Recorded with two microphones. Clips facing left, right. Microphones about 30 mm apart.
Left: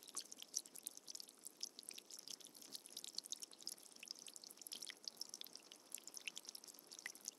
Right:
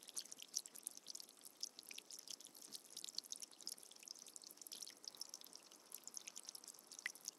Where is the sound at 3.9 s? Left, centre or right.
Left.